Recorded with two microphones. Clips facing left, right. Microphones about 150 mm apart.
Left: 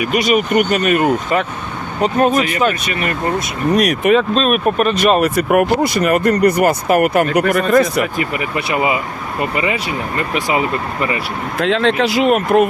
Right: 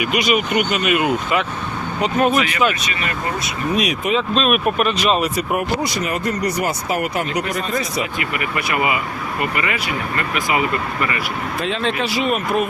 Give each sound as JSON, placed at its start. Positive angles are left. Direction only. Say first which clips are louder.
{"t": 0.0, "sound": "speech", "louder": "left 3 dB", "side_deg": 40}
{"t": 2.8, "sound": "speech", "louder": "left 5 dB", "side_deg": 50}
{"t": 4.4, "sound": "speech", "louder": "left 3 dB", "side_deg": 35}
{"t": 4.9, "sound": "speech", "louder": "left 5 dB", "side_deg": 55}
{"t": 8.7, "sound": "speech", "louder": "left 3 dB", "side_deg": 25}
{"t": 11.6, "sound": "speech", "louder": "left 8 dB", "side_deg": 90}